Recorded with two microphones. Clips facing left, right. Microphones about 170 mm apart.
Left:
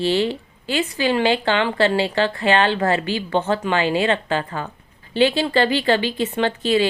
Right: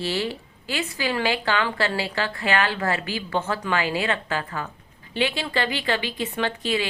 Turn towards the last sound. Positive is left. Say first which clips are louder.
# left 6 dB
turn(degrees=30)  # may be behind; listen again after turning